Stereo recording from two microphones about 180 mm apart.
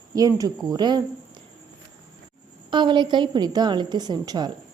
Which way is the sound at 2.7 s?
25° right (ahead or behind).